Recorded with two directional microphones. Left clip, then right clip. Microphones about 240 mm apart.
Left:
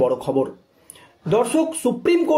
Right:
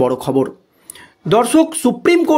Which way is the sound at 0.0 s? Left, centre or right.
Right.